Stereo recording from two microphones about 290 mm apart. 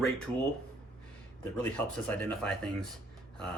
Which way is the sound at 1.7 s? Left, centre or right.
Centre.